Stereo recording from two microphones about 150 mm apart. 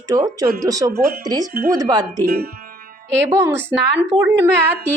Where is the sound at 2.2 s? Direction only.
90° right.